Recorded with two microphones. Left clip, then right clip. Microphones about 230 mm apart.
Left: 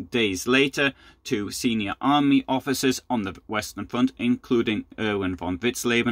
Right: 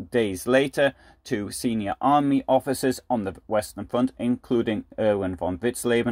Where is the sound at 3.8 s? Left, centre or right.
Left.